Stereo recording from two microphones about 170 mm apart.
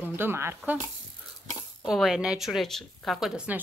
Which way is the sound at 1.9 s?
Centre (ahead or behind).